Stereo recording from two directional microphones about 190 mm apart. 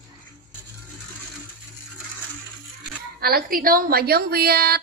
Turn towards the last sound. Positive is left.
turn(degrees=-55)  # may be behind; listen again after turning